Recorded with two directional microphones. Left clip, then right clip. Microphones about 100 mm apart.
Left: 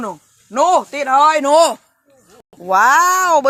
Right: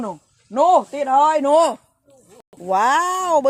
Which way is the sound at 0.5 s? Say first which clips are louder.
Left 1 dB; 10° right (ahead or behind).